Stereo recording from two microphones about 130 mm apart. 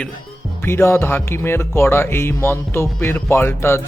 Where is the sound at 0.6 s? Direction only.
20° left (ahead or behind).